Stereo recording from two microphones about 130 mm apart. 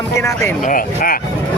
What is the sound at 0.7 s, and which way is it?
Speech, 90° left.